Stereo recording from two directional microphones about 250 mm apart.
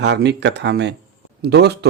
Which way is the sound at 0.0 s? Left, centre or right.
Right.